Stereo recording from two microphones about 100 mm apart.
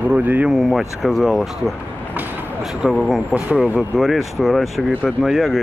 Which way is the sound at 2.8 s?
Centre (ahead or behind).